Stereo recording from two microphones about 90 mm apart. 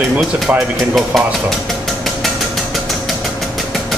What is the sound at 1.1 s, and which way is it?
Speech, 5° left (ahead or behind).